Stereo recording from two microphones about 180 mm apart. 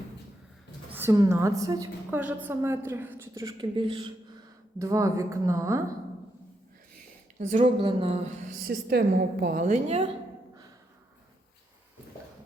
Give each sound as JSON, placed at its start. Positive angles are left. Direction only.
{"t": 0.9, "sound": "a woman's voice", "side_deg": -15}
{"t": 4.8, "sound": "a woman's voice", "side_deg": -15}
{"t": 7.6, "sound": "speech", "side_deg": -30}
{"t": 8.6, "sound": "a woman's voice", "side_deg": -60}